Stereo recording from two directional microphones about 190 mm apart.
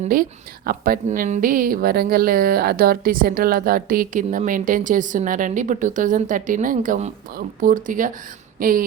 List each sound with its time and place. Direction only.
0.1 s a woman's voice: 50° right (ahead or behind)